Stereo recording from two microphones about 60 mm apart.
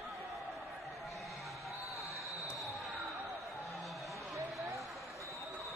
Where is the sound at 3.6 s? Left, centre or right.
Centre.